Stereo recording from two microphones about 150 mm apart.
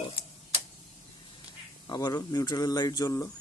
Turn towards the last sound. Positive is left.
turn(degrees=25)  # may be behind; listen again after turning